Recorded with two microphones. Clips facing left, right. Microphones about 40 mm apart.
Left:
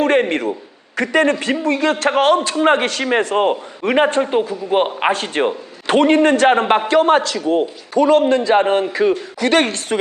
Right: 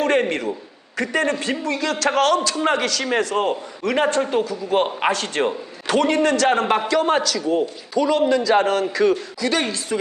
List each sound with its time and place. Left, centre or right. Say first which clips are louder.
0.0 s a sound: left 4 dB; left
0.9 s a man's voice: left 5 dB; left
5.9 s a man's voice: left 5 dB; left
8.3 s a man's voice: left 3 dB; left
9.4 s a man's voice: left 6 dB; left